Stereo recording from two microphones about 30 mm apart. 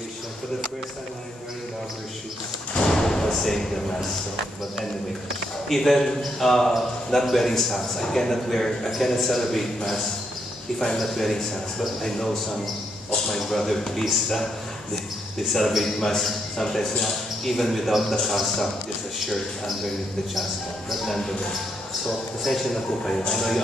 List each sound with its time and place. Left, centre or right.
2.8 s slam: centre
3.3 s a man's voice: centre
5.7 s a man's voice: centre
11.0 s a man's voice: centre
13.4 s a man's voice: centre
20.9 s a man's voice: centre
22.4 s a man's voice: centre